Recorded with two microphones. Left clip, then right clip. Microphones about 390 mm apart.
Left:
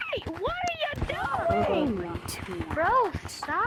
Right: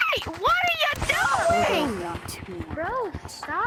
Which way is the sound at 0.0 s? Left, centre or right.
Right.